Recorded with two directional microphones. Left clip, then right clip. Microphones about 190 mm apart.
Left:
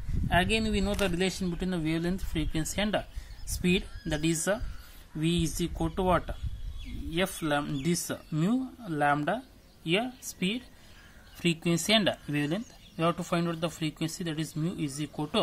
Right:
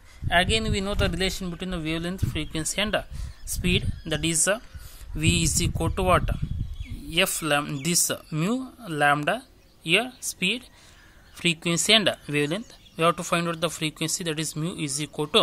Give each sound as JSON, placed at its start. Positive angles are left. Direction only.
{"t": 0.3, "sound": "speech", "side_deg": -25}